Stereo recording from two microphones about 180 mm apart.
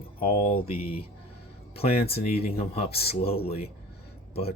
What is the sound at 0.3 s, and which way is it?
Speech, 35° left (ahead or behind).